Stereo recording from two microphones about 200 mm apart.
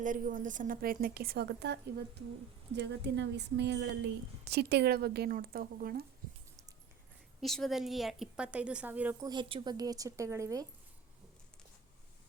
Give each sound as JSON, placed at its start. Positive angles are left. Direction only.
{"t": 0.0, "sound": "a woman's voice", "side_deg": -40}
{"t": 7.4, "sound": "speech", "side_deg": 0}
{"t": 9.3, "sound": "a woman's voice", "side_deg": -25}